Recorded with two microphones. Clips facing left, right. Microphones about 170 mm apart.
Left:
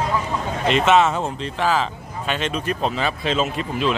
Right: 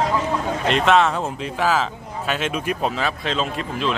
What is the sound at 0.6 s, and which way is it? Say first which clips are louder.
Speech: left 1 dB; centre (ahead or behind).